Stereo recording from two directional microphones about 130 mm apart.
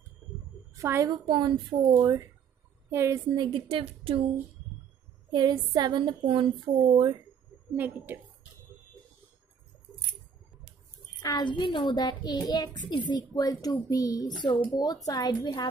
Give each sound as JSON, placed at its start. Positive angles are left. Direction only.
{"t": 0.7, "sound": "a woman's voice", "side_deg": -20}
{"t": 1.2, "sound": "a woman's voice", "side_deg": -35}
{"t": 2.9, "sound": "a woman's voice", "side_deg": -20}
{"t": 3.3, "sound": "a woman's voice", "side_deg": -40}
{"t": 5.3, "sound": "a woman's voice", "side_deg": -30}
{"t": 7.7, "sound": "a woman's voice", "side_deg": -15}
{"t": 11.2, "sound": "a child's voice", "side_deg": 35}